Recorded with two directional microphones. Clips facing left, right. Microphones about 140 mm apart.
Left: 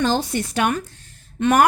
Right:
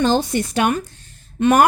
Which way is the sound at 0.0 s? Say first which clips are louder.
Right 3 dB; 20° right (ahead or behind).